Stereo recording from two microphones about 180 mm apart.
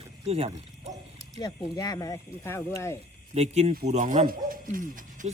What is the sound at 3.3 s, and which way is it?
Speech, 35° right (ahead or behind).